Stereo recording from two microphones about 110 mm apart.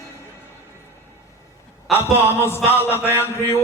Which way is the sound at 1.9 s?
20° left (ahead or behind).